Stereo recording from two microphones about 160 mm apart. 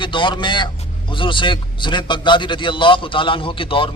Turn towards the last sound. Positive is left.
turn(degrees=35)  # may be behind; listen again after turning